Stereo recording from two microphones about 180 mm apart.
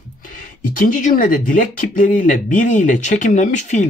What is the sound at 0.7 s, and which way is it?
Speech, 45° left (ahead or behind).